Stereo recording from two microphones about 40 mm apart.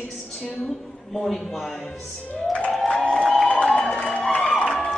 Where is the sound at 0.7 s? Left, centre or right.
Centre.